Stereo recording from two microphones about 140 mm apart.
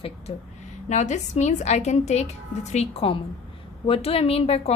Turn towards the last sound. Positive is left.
turn(degrees=45)  # may be behind; listen again after turning